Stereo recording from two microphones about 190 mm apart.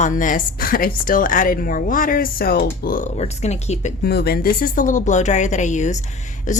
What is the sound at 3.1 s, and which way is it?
Speech, 35° left (ahead or behind).